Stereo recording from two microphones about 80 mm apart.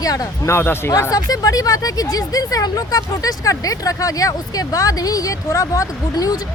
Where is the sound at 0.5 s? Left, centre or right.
Left.